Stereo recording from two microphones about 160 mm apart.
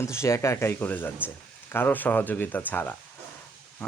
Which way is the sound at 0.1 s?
15° left (ahead or behind).